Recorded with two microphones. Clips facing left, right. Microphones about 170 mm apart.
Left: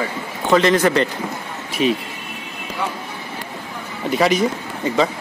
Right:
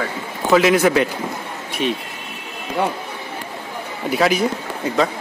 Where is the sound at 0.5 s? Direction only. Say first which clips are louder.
Right 1 dB; 5° right (ahead or behind).